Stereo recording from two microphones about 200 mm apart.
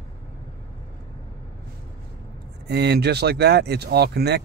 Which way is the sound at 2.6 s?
55° right (ahead or behind).